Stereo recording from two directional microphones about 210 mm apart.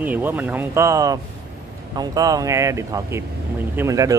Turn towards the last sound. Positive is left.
turn(degrees=-15)  # may be behind; listen again after turning